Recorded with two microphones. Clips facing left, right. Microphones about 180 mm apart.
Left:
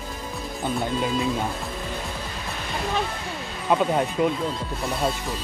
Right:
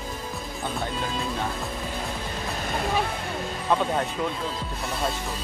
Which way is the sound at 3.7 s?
10° left (ahead or behind).